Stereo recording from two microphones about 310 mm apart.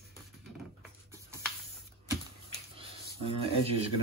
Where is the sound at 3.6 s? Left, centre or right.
Centre.